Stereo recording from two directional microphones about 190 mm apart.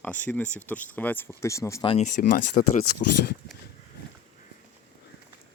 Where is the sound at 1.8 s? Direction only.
30° left (ahead or behind).